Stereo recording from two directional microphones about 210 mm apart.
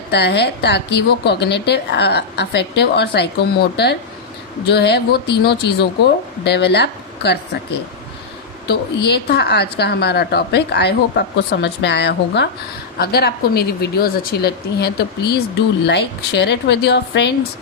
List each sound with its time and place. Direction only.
0.1 s a woman's voice: 55° left (ahead or behind)
8.6 s a woman's voice: 50° left (ahead or behind)